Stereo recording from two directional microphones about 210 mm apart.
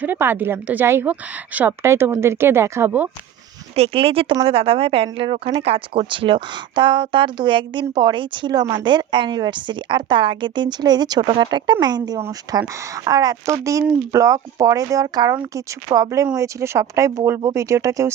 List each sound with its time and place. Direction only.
0.0 s speech: 10° right (ahead or behind)
3.8 s speech: 25° right (ahead or behind)